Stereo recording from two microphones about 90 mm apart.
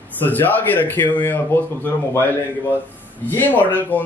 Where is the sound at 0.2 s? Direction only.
20° left (ahead or behind).